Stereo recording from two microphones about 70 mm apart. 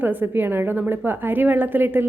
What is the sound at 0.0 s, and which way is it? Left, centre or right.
A woman's voice, right.